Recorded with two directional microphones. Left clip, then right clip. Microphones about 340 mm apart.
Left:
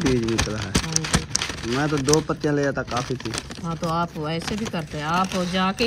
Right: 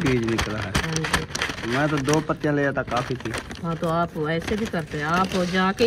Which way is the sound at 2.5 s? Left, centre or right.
Right.